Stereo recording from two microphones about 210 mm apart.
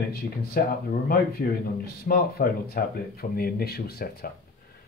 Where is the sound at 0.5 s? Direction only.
45° left (ahead or behind).